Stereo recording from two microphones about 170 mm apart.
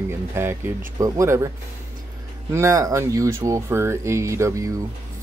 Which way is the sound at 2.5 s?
20° right (ahead or behind).